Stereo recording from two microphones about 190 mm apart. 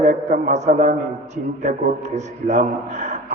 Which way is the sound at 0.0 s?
40° right (ahead or behind).